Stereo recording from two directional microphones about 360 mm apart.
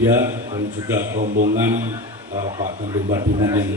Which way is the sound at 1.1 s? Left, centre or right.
Right.